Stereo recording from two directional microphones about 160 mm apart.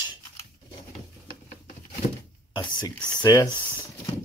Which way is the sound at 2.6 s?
25° left (ahead or behind).